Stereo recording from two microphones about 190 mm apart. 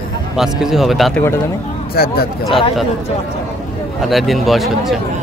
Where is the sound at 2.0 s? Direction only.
55° left (ahead or behind).